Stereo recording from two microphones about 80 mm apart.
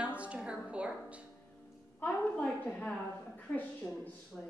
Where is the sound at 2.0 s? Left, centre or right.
Centre.